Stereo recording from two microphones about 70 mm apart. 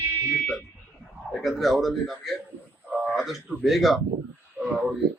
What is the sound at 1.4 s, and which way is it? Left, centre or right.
Speech, centre.